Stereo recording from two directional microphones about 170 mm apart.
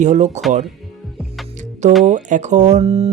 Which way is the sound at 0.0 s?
45° right (ahead or behind).